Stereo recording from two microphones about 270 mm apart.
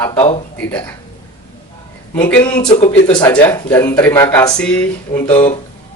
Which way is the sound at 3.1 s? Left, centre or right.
Centre.